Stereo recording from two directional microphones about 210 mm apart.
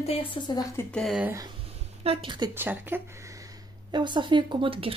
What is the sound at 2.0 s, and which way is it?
Speech, 25° right (ahead or behind).